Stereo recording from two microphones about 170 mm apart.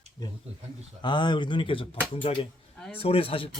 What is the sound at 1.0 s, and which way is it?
Speech, 25° left (ahead or behind).